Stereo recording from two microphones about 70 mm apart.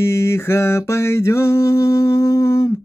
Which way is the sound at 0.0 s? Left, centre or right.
Left.